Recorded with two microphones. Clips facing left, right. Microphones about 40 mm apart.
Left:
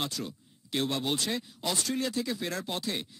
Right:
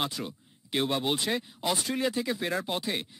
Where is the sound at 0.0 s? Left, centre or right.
Centre.